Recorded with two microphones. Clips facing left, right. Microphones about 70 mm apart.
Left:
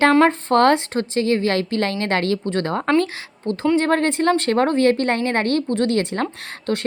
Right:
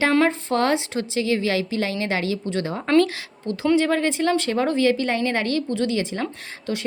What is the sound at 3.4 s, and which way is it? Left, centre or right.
A woman's voice, left.